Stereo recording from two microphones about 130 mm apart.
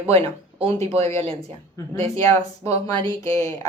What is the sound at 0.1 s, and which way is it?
Speech, 45° right (ahead or behind).